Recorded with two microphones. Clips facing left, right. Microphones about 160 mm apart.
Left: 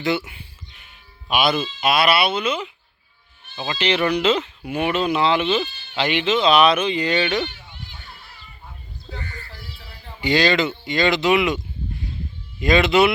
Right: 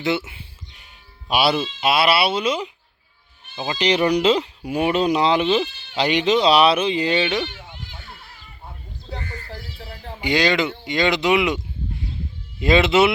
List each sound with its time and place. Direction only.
1.3 s speech: 30° right (ahead or behind)
3.5 s speech: 20° right (ahead or behind)
3.8 s speech: 35° right (ahead or behind)
9.0 s music: 40° right (ahead or behind)
10.2 s speech: 15° right (ahead or behind)